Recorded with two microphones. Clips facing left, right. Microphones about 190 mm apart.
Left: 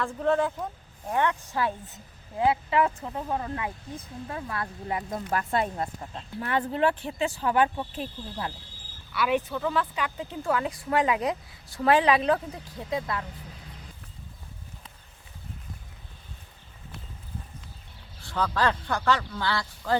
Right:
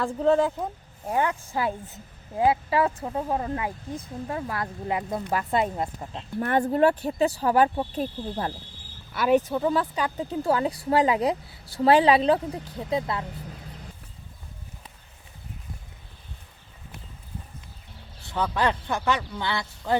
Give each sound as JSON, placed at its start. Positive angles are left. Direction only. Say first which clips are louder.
{"t": 0.0, "sound": "speech", "louder": "right 4 dB", "side_deg": -30}
{"t": 2.4, "sound": "speech", "louder": "right 2 dB", "side_deg": -30}
{"t": 6.4, "sound": "speech", "louder": "right 5 dB", "side_deg": -45}
{"t": 18.2, "sound": "speech", "louder": "right 1 dB", "side_deg": -20}